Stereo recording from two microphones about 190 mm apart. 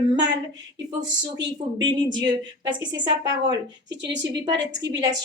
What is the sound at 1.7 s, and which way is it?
A woman's voice, 25° right (ahead or behind).